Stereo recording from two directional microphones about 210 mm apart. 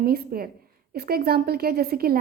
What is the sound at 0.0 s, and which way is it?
A woman's voice, 45° right (ahead or behind).